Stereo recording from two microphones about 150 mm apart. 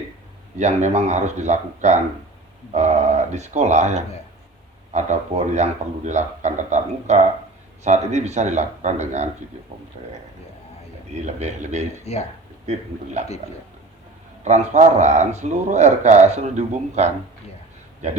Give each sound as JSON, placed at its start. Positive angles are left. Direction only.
{"t": 0.6, "sound": "a man's voice", "side_deg": -50}
{"t": 11.3, "sound": "a man's voice", "side_deg": -50}
{"t": 12.1, "sound": "speech", "side_deg": 45}
{"t": 12.7, "sound": "a man's voice", "side_deg": -50}
{"t": 14.4, "sound": "a man's voice", "side_deg": -50}